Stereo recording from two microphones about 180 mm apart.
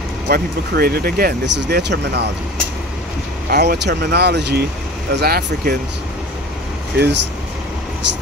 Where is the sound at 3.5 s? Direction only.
65° right (ahead or behind).